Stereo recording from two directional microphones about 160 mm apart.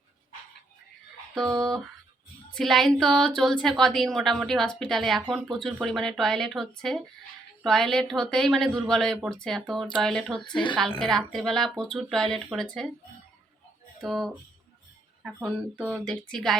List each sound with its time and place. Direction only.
1.5 s speech: 25° right (ahead or behind)
2.5 s a woman's voice: centre (ahead or behind)
14.0 s a woman's voice: centre (ahead or behind)